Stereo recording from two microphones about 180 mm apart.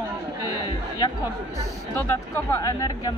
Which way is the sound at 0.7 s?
25° left (ahead or behind).